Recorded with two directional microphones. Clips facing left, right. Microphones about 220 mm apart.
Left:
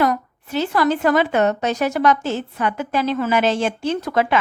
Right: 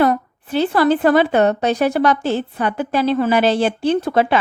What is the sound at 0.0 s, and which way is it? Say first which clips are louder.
A woman's voice: right 3 dB; 30° right (ahead or behind).